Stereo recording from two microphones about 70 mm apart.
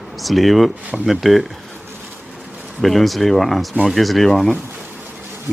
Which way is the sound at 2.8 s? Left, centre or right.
Centre.